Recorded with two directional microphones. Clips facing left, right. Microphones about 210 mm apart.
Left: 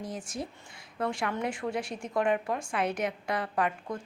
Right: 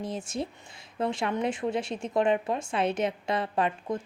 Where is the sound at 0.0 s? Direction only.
25° right (ahead or behind).